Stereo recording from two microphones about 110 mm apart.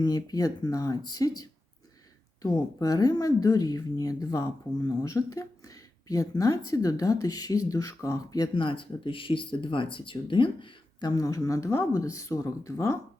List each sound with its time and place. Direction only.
0.0 s speech: 35° left (ahead or behind)
2.8 s speech: 35° left (ahead or behind)
8.5 s speech: 50° left (ahead or behind)
11.1 s speech: 30° left (ahead or behind)